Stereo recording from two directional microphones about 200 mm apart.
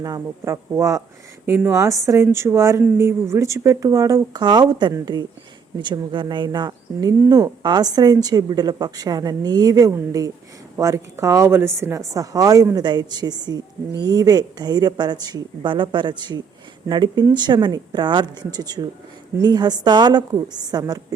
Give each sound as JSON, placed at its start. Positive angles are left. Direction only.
{"t": 0.0, "sound": "a woman's voice", "side_deg": -15}